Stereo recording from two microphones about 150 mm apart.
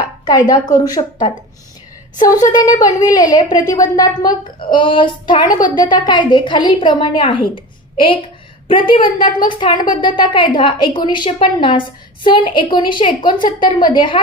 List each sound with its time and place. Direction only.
0.2 s a woman's voice: 30° left (ahead or behind)
8.6 s a woman's voice: 35° left (ahead or behind)